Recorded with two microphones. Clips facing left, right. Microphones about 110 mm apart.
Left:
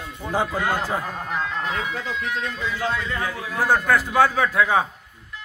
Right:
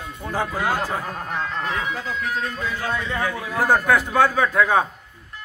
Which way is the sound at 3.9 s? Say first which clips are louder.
Right 1 dB; centre (ahead or behind).